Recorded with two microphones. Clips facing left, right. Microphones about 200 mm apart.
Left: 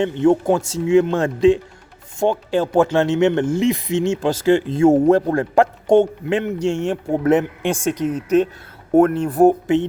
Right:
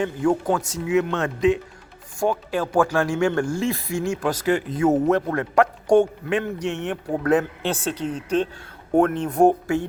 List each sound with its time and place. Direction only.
0.0 s speech: 25° left (ahead or behind); by 9.6 s 5° left (ahead or behind)